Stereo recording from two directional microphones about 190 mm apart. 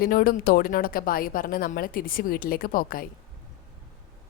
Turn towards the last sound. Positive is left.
turn(degrees=50)  # may be behind; listen again after turning